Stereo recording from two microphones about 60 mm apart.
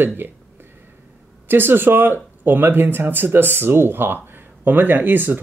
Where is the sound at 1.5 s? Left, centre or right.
Right.